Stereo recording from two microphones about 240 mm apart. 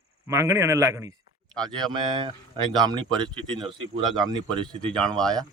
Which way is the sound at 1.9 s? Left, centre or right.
Centre.